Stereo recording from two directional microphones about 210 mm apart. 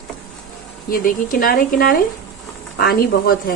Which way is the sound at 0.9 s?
45° left (ahead or behind).